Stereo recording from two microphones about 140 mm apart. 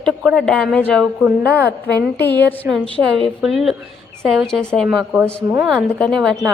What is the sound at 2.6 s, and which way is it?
Speech, 15° right (ahead or behind).